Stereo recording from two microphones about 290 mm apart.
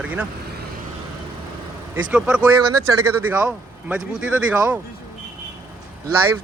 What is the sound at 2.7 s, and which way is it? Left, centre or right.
Speech, right.